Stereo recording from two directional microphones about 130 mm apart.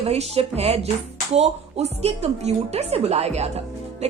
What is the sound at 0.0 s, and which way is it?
A woman's voice, 50° right (ahead or behind).